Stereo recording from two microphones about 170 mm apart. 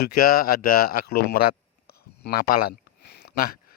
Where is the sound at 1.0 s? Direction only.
70° left (ahead or behind).